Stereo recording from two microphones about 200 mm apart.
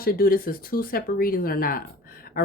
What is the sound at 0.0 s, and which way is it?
Speech, 45° left (ahead or behind).